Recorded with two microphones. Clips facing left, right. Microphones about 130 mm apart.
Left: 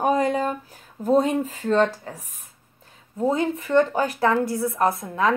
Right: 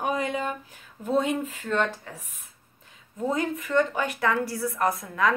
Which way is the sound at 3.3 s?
30° left (ahead or behind).